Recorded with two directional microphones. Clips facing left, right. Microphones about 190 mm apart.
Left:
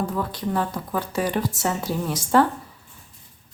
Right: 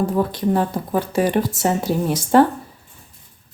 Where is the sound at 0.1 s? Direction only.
30° right (ahead or behind).